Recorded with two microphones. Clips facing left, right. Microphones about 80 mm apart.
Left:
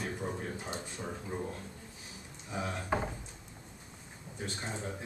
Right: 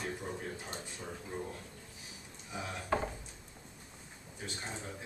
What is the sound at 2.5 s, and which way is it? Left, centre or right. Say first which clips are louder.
Speech: left 1 dB; left.